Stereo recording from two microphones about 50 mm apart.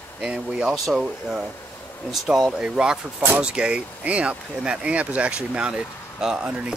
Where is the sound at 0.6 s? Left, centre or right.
Centre.